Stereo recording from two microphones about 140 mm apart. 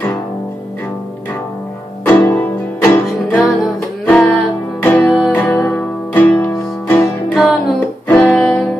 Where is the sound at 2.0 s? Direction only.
15° left (ahead or behind).